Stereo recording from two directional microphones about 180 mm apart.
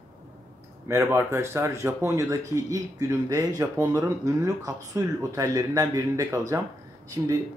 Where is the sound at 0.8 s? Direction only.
15° right (ahead or behind).